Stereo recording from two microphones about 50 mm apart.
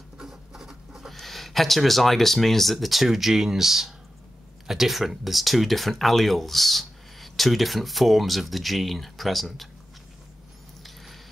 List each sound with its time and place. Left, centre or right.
0.2 s speech: centre